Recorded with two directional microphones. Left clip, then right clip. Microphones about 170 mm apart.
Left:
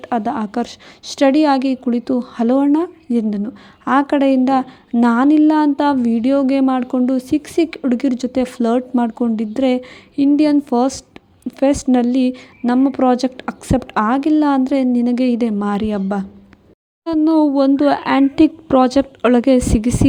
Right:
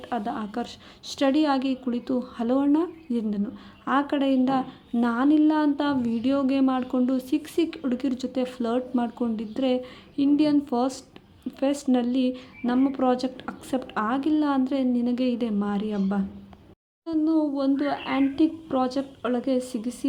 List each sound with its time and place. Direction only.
0.0 s a woman's voice: 40° left (ahead or behind)